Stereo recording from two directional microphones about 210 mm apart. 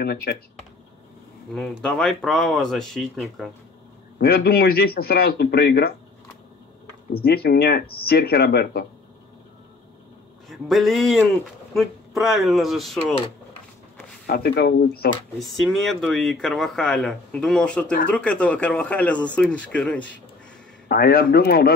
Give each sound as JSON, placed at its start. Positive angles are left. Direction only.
{"t": 0.0, "sound": "a man's voice", "side_deg": 50}
{"t": 1.5, "sound": "speech", "side_deg": 0}
{"t": 4.2, "sound": "a man's voice", "side_deg": 45}
{"t": 7.1, "sound": "a man's voice", "side_deg": 45}
{"t": 10.5, "sound": "speech", "side_deg": 0}
{"t": 14.2, "sound": "a man's voice", "side_deg": 50}
{"t": 15.3, "sound": "speech", "side_deg": 0}
{"t": 20.9, "sound": "a man's voice", "side_deg": 45}